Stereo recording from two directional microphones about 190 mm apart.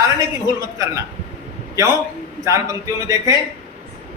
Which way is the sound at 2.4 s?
15° right (ahead or behind).